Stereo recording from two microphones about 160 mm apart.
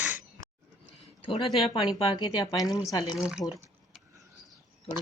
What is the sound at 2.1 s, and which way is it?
Speech, 25° left (ahead or behind).